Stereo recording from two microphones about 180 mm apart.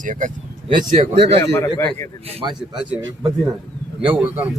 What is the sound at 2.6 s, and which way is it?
Speech, 5° right (ahead or behind).